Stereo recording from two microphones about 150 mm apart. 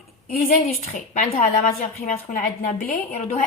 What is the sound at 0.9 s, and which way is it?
Speech, 60° left (ahead or behind).